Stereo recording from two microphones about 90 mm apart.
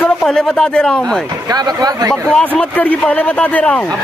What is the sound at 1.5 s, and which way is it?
Speech, 45° right (ahead or behind).